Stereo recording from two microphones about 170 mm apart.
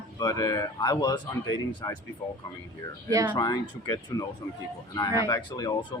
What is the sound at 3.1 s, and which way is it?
Speech, 20° right (ahead or behind).